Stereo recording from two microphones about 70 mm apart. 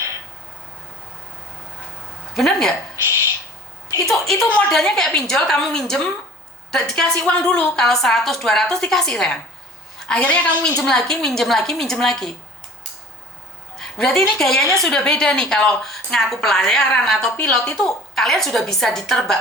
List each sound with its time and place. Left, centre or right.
2.3 s a woman's voice: centre
4.0 s a woman's voice: centre
10.2 s a woman's voice: centre
10.8 s a woman's voice: centre
13.7 s a woman's voice: centre